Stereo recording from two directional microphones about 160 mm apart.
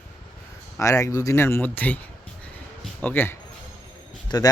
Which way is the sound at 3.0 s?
15° left (ahead or behind).